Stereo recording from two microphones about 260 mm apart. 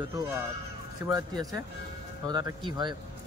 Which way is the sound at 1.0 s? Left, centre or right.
Centre.